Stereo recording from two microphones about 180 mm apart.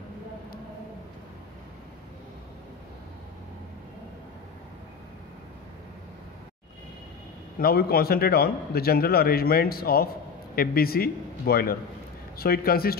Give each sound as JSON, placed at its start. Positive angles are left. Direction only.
{"t": 7.5, "sound": "a man's voice", "side_deg": 55}